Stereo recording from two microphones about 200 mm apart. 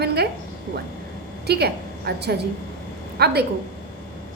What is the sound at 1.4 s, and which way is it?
A woman's voice, 55° right (ahead or behind).